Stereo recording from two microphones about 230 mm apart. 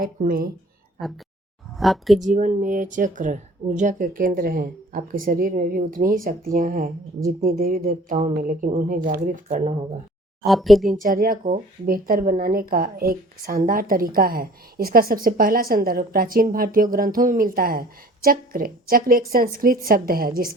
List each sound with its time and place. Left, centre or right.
0.0 s a woman's voice: right
1.0 s speech: centre
2.2 s a woman's voice: right
10.4 s speech: centre
11.0 s a woman's voice: right